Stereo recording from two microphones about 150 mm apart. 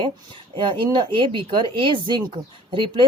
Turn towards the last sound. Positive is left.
turn(degrees=-35)  # may be behind; listen again after turning